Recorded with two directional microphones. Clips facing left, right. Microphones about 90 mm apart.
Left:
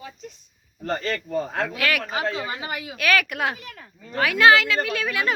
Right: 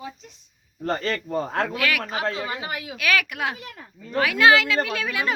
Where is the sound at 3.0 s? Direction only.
10° right (ahead or behind).